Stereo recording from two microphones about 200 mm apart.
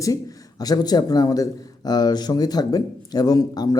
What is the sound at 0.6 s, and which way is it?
A man's voice, 20° left (ahead or behind).